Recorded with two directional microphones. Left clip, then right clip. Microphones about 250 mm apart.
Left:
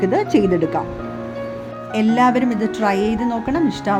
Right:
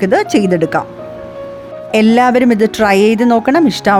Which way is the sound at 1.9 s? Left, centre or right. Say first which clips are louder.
Right 7 dB; right.